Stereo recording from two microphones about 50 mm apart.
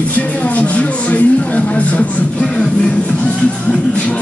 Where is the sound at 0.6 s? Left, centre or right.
Left.